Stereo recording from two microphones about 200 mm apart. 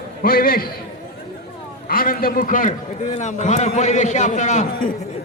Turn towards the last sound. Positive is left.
turn(degrees=35)  # may be behind; listen again after turning